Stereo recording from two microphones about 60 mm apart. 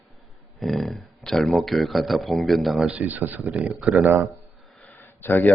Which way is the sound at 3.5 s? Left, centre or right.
Centre.